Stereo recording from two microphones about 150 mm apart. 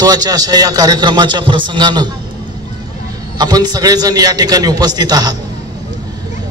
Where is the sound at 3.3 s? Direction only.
25° right (ahead or behind).